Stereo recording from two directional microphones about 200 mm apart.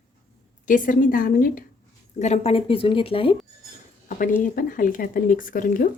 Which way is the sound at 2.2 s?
35° left (ahead or behind).